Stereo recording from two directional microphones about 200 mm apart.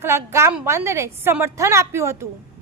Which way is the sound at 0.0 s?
10° right (ahead or behind).